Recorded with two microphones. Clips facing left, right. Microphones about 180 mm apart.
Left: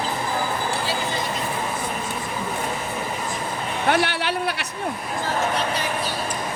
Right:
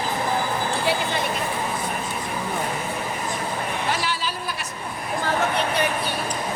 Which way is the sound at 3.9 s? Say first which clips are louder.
Left 5 dB; 65° left (ahead or behind).